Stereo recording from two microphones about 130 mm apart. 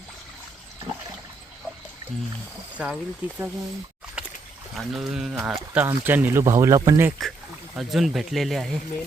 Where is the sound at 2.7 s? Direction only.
10° right (ahead or behind).